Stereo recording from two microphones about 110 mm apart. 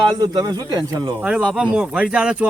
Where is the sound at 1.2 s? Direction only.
10° right (ahead or behind).